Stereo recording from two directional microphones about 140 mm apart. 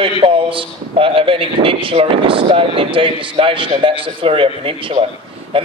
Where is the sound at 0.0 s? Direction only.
40° right (ahead or behind).